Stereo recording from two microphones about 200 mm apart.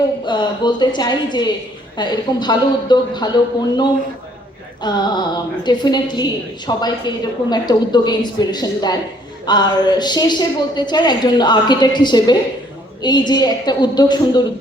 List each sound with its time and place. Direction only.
0.3 s a woman's voice: 20° left (ahead or behind)